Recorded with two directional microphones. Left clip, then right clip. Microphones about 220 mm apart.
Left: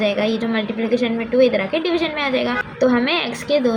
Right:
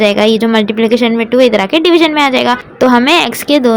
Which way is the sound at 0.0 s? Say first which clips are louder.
Right 10 dB; 50° right (ahead or behind).